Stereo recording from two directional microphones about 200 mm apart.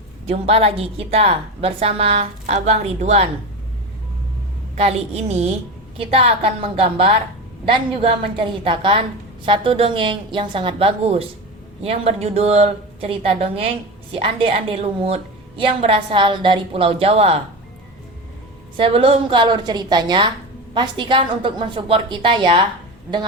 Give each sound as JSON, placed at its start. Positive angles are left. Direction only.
{"t": 0.3, "sound": "a woman's voice", "side_deg": -30}
{"t": 4.7, "sound": "a woman's voice", "side_deg": -30}
{"t": 18.8, "sound": "a woman's voice", "side_deg": -30}